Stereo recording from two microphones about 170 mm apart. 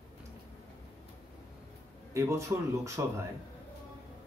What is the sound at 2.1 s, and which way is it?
A man's voice, 15° right (ahead or behind).